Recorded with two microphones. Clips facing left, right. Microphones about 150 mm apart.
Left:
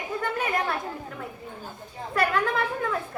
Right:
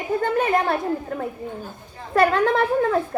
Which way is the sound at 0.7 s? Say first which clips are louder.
Right 8 dB; 45° right (ahead or behind).